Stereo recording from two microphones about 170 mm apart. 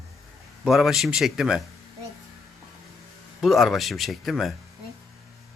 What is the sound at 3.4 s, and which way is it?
Speech, centre (ahead or behind).